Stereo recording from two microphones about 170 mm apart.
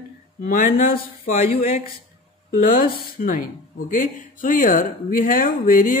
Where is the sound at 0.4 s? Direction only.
55° left (ahead or behind).